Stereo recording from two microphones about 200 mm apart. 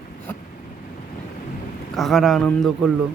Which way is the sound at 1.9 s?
Centre (ahead or behind).